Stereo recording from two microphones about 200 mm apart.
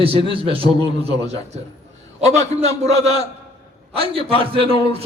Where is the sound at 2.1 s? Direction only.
35° right (ahead or behind).